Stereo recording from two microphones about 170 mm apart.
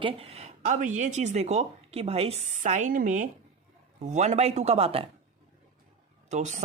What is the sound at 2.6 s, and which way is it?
A woman's voice, 45° right (ahead or behind).